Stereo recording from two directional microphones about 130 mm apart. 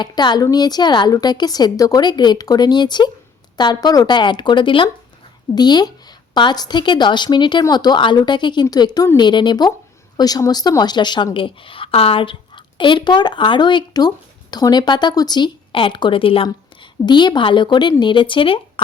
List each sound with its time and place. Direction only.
0.0 s a woman's voice: 35° left (ahead or behind)